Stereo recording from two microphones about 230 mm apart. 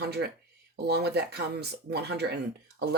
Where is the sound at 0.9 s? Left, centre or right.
Right.